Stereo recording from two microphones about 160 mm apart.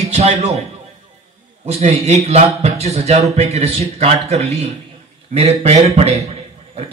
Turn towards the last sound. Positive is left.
turn(degrees=-45)  # may be behind; listen again after turning